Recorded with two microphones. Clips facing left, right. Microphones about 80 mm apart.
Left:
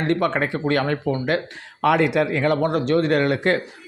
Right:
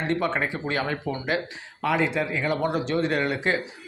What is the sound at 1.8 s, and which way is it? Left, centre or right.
Speech, left.